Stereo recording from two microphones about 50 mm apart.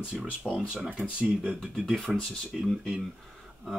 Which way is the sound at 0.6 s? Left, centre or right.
Centre.